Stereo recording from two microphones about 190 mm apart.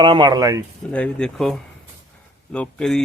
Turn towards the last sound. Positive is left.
turn(degrees=5)  # may be behind; listen again after turning